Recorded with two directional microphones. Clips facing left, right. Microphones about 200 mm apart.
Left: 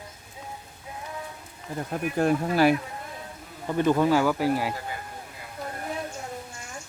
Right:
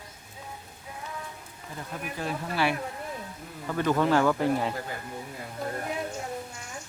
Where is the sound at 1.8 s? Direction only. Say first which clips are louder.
Left 9 dB; 50° left (ahead or behind).